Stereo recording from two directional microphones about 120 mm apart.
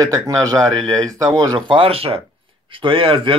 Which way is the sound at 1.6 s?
50° right (ahead or behind).